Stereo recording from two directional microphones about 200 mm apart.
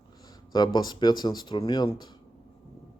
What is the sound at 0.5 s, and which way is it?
Speech, 20° left (ahead or behind).